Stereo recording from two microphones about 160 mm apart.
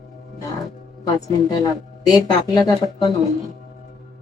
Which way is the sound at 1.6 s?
25° left (ahead or behind).